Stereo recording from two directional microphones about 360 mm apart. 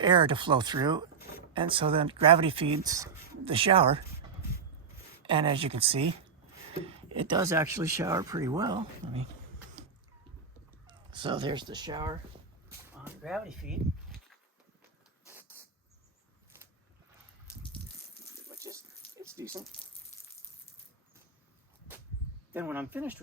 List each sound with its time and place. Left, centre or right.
0.0 s speech: centre
5.2 s speech: centre
7.3 s speech: centre
10.8 s fowl: centre
12.6 s a sound: centre
18.6 s a sound: centre
22.5 s speech: centre